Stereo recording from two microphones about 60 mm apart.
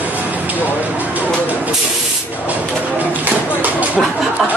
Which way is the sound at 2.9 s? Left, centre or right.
Right.